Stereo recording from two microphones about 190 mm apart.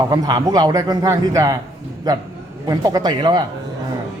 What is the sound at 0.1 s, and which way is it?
A man's voice, 20° right (ahead or behind).